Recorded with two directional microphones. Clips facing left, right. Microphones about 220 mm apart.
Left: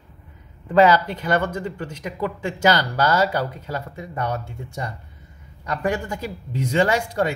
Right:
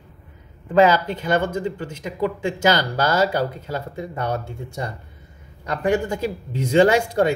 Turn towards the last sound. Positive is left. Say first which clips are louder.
# right 4 dB
turn(degrees=-25)  # may be behind; listen again after turning